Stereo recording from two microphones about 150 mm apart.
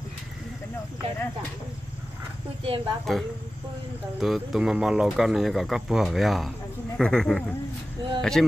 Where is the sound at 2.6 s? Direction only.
35° right (ahead or behind).